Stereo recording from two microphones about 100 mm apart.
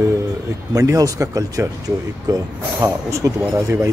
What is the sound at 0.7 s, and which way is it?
Speech, 35° right (ahead or behind).